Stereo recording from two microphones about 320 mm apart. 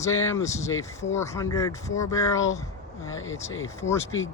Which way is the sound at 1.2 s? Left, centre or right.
Centre.